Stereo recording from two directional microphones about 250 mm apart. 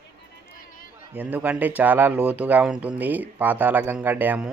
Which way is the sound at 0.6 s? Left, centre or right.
Left.